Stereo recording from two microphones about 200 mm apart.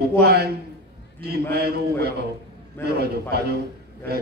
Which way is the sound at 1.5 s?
50° right (ahead or behind).